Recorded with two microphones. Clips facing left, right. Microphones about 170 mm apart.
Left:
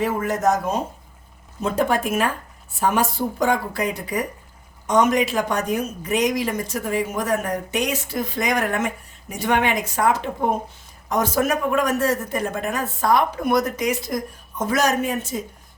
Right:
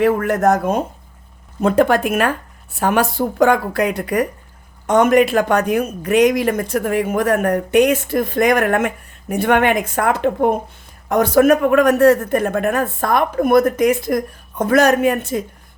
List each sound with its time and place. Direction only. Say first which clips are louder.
0.0 s speech: right 6 dB; 60° right (ahead or behind)